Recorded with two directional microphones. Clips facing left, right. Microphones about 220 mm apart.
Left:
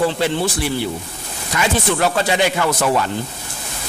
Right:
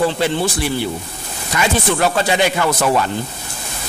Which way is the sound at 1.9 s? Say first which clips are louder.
Right 1 dB; 15° right (ahead or behind).